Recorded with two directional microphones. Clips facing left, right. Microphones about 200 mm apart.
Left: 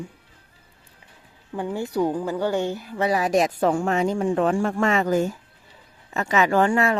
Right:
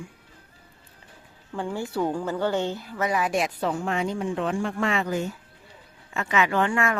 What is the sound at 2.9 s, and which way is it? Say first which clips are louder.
A woman's voice: left 5 dB; 35° left (ahead or behind).